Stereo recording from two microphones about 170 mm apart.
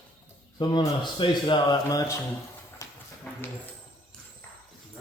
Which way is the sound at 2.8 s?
20° left (ahead or behind).